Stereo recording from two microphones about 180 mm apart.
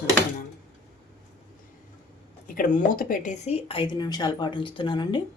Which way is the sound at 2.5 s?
50° left (ahead or behind).